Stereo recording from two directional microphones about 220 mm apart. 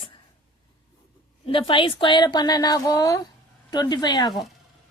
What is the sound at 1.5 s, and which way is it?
Speech, 25° left (ahead or behind).